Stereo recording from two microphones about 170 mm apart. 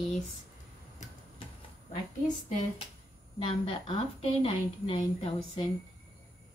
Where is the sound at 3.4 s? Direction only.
30° left (ahead or behind).